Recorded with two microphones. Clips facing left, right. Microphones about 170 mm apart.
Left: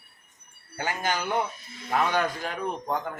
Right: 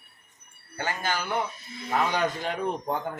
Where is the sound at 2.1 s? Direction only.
20° right (ahead or behind).